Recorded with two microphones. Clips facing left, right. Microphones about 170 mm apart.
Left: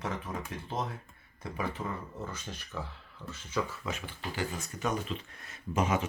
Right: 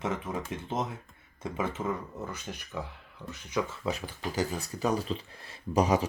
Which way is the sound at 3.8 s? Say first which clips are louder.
Right 5 dB; 40° right (ahead or behind).